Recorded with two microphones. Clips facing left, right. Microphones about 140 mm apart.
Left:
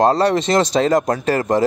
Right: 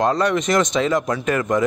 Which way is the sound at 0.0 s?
35° left (ahead or behind).